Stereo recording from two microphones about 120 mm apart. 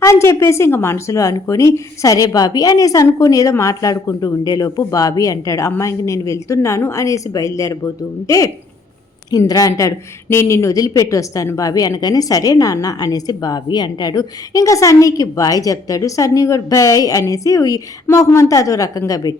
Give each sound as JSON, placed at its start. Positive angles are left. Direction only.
{"t": 0.0, "sound": "a woman's voice", "side_deg": 25}